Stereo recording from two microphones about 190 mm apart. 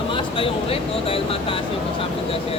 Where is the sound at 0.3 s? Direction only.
30° left (ahead or behind).